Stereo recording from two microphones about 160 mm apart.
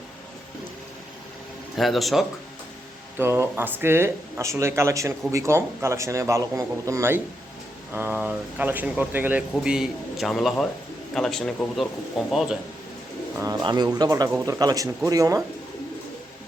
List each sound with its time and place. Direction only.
1.7 s speech: centre (ahead or behind)
3.2 s a man's voice: 15° right (ahead or behind)
13.4 s a man's voice: 25° right (ahead or behind)